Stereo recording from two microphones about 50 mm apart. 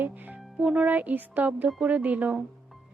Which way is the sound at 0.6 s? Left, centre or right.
Right.